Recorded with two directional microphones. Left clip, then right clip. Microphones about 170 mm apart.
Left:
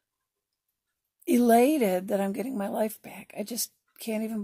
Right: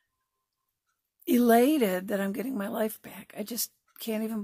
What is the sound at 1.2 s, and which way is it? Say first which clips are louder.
Speech: left 1 dB; 10° right (ahead or behind).